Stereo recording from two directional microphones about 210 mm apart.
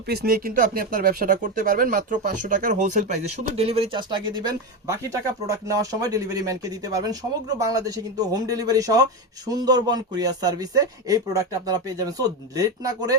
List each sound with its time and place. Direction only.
0.1 s speech: 50° right (ahead or behind); by 13.1 s 15° right (ahead or behind)